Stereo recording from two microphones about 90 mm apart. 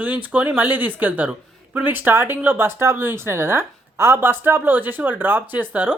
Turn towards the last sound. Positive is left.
turn(degrees=-20)  # may be behind; listen again after turning